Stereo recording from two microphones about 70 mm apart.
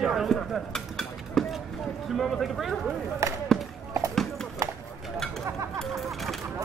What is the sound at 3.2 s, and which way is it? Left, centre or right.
Speech, right.